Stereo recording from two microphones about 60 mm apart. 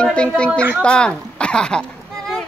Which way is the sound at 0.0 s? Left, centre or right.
Centre.